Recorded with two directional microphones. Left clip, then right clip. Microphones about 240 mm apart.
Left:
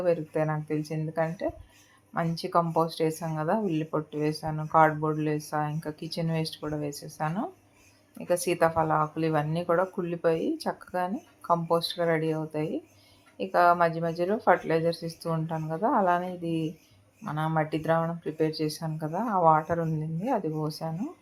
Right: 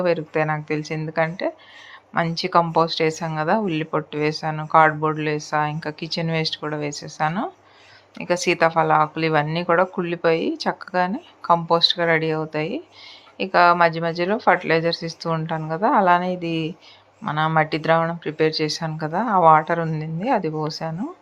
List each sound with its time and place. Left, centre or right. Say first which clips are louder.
0.0 s speech: right 6 dB; centre